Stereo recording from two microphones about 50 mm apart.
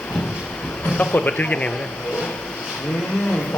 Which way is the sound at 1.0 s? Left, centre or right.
Left.